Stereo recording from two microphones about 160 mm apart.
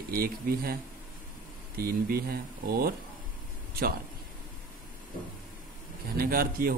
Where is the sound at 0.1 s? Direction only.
70° right (ahead or behind).